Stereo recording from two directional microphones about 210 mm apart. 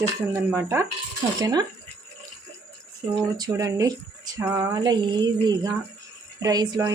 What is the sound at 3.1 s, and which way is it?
Speech, 20° right (ahead or behind).